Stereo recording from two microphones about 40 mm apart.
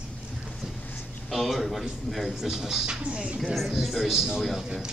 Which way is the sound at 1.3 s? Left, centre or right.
Centre.